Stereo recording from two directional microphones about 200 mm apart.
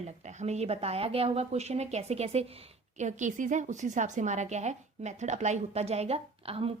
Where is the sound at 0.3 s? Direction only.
35° right (ahead or behind).